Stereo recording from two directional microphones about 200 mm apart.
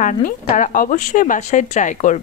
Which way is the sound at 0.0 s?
40° left (ahead or behind).